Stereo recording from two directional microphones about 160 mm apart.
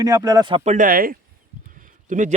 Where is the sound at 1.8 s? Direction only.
55° right (ahead or behind).